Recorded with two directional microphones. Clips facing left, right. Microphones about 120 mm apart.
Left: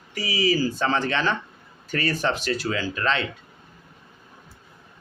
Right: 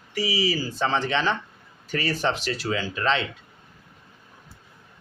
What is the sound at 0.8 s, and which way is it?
Speech, 20° right (ahead or behind).